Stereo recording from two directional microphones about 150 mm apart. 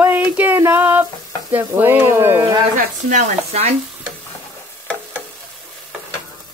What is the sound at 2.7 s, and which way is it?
Speech, 60° right (ahead or behind).